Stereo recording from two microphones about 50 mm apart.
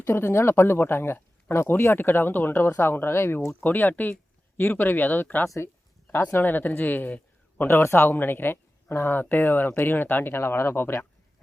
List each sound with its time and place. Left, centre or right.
0.0 s speech: left
3.6 s speech: left
7.6 s speech: left
10.3 s speech: left